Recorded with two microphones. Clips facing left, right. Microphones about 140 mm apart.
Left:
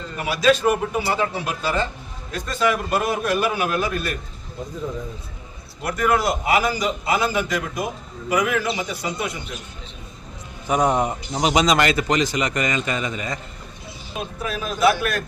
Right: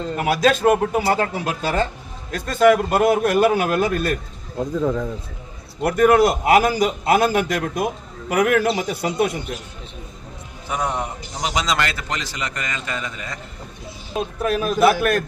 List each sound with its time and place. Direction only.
0.2 s a man's voice: 55° right (ahead or behind)
4.5 s speech: 90° right
5.8 s a man's voice: 60° right (ahead or behind)
10.7 s a man's voice: 20° left (ahead or behind)
14.4 s a man's voice: 55° right (ahead or behind)